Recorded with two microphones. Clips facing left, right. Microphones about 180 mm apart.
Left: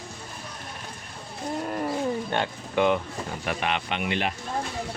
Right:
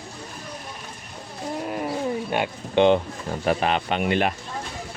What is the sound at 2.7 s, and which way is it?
Speech, 25° right (ahead or behind).